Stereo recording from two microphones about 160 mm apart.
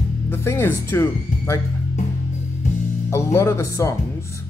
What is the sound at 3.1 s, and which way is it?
Speech, 15° left (ahead or behind).